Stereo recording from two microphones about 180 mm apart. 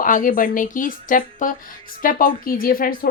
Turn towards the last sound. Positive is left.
turn(degrees=50)  # may be behind; listen again after turning